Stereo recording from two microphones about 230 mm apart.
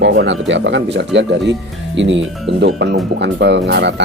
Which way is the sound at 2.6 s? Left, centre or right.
Right.